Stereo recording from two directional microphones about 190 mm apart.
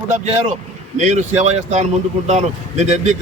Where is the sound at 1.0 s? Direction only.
40° right (ahead or behind).